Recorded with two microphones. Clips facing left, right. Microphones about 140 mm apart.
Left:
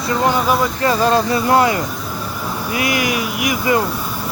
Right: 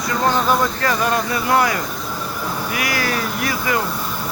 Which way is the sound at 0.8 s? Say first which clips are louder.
Left 4 dB; 25° left (ahead or behind).